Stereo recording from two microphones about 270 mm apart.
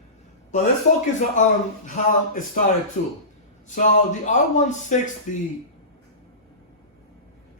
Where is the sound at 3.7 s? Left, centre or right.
Left.